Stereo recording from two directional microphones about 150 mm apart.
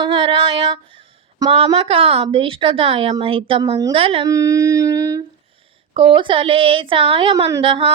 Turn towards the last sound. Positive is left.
turn(degrees=-35)  # may be behind; listen again after turning